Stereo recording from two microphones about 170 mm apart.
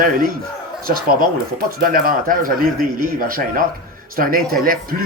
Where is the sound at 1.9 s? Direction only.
55° right (ahead or behind).